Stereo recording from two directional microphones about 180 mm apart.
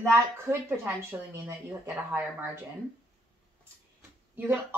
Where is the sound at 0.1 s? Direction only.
15° right (ahead or behind).